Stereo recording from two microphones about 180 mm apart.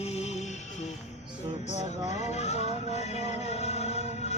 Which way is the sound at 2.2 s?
35° left (ahead or behind).